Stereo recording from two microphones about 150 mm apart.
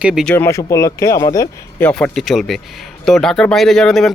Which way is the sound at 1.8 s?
5° left (ahead or behind).